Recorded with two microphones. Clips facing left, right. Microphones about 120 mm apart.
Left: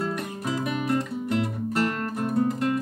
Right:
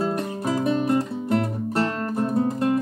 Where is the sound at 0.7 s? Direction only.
30° right (ahead or behind).